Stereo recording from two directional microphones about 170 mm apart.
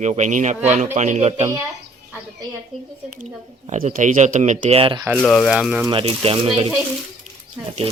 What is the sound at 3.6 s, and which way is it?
Speech, 50° right (ahead or behind).